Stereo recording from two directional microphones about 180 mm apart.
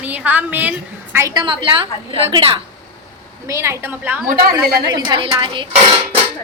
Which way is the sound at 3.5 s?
15° right (ahead or behind).